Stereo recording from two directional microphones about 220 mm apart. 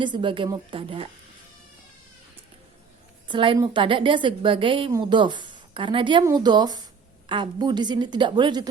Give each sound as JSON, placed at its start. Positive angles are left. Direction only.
{"t": 0.0, "sound": "a woman's voice", "side_deg": -20}
{"t": 3.2, "sound": "a woman's voice", "side_deg": -20}